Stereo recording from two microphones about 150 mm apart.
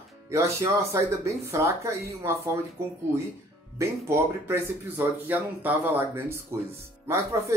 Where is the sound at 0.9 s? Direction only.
20° right (ahead or behind).